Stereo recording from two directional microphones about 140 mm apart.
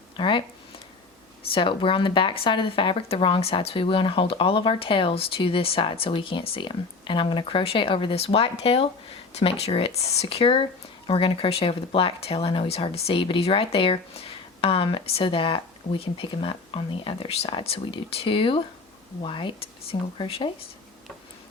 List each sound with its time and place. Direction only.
0.2 s speech: 35° left (ahead or behind)
1.5 s speech: 40° left (ahead or behind)